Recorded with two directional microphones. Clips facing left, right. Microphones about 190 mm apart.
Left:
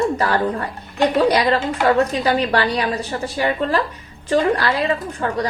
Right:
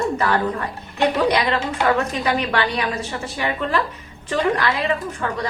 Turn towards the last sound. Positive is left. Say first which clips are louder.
# left 3 dB
turn(degrees=35)  # may be behind; listen again after turning